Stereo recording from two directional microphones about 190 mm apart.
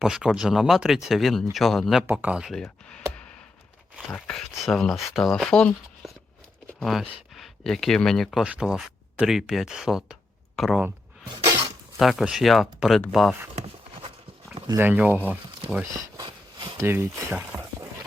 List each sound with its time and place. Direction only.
0.0 s speech: 5° right (ahead or behind)
11.9 s speech: centre (ahead or behind)
14.8 s speech: 10° right (ahead or behind)
16.1 s a sound: 25° right (ahead or behind)
16.8 s speech: 10° right (ahead or behind)